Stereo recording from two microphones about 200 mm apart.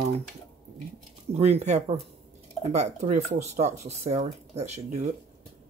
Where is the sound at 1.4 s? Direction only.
30° right (ahead or behind).